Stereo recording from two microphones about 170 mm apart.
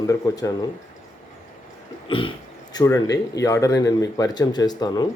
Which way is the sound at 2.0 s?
30° left (ahead or behind).